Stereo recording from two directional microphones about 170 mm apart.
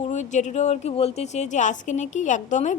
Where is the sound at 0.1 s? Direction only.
45° left (ahead or behind).